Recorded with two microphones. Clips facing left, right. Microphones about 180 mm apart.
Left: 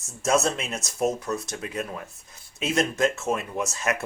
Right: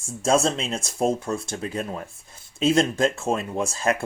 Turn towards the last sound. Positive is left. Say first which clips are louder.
# right 4 dB
turn(degrees=-30)  # may be behind; listen again after turning